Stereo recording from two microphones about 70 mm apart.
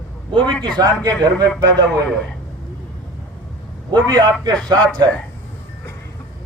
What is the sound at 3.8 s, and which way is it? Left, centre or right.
Speech, right.